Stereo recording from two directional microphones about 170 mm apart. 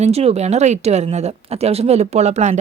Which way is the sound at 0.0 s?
35° right (ahead or behind).